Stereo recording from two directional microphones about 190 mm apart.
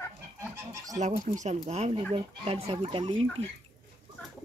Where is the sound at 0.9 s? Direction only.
40° right (ahead or behind).